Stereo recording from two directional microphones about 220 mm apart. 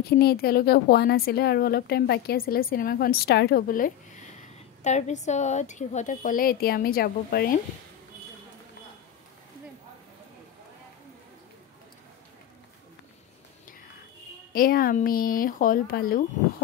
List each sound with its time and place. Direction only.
0.2 s a woman's voice: 45° left (ahead or behind)
14.5 s speech: 40° left (ahead or behind)